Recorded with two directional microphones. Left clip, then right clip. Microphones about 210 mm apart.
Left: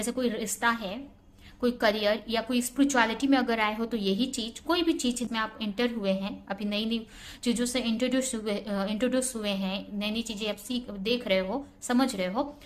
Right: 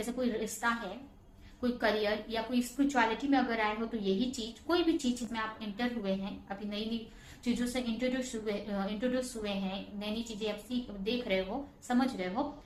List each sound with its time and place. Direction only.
0.0 s a woman's voice: 40° left (ahead or behind)